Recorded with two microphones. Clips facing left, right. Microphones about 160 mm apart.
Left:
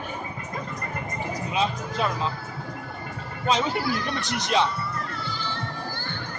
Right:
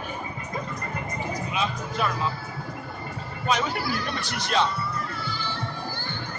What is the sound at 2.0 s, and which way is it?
Speech, 25° left (ahead or behind).